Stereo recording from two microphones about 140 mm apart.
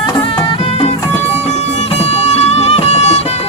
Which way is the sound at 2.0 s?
50° left (ahead or behind).